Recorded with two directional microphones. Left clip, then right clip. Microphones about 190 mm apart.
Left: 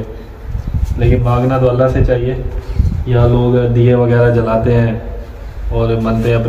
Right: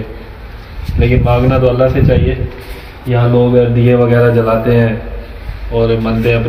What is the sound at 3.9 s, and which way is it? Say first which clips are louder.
Speech: right 1 dB; 35° right (ahead or behind).